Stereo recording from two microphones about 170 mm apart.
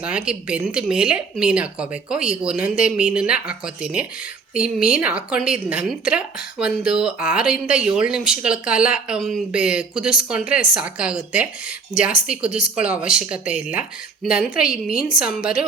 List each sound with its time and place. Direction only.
0.0 s a woman's voice: 5° right (ahead or behind)
12.5 s speech: 50° left (ahead or behind)
12.7 s a woman's voice: 5° right (ahead or behind)